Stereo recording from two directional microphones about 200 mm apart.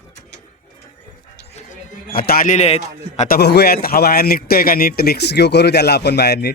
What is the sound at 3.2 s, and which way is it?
A man's voice, 50° left (ahead or behind).